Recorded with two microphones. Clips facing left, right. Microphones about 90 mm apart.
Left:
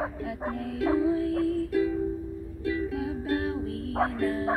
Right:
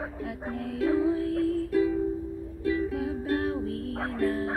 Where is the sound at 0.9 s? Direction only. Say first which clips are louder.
Left 1 dB; 15° left (ahead or behind).